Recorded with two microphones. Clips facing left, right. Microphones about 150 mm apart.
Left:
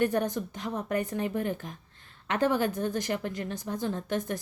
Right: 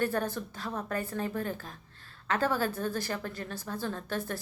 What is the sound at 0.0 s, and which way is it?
A woman's voice, 15° left (ahead or behind).